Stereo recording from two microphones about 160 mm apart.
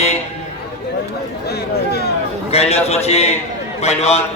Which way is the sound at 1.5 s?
85° left.